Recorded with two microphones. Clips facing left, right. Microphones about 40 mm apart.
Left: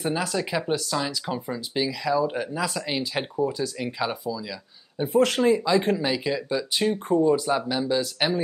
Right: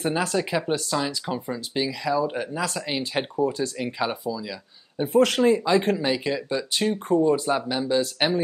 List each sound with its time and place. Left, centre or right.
0.2 s speech: right
0.5 s speech: centre
6.9 s speech: centre
7.4 s speech: centre